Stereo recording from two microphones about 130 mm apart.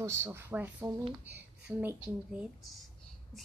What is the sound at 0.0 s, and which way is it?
Speech, 20° right (ahead or behind).